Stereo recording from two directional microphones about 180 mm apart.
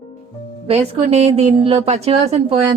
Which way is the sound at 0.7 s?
35° right (ahead or behind).